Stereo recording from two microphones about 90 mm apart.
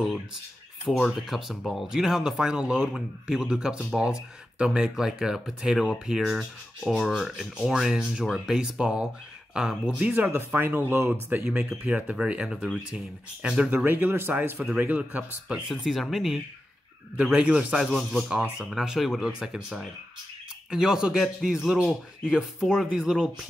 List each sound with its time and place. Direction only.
0.8 s speech: centre (ahead or behind); by 11.4 s 25° right (ahead or behind)
11.9 s speech: 15° right (ahead or behind)
15.7 s speech: centre (ahead or behind)
17.2 s speech: 15° right (ahead or behind)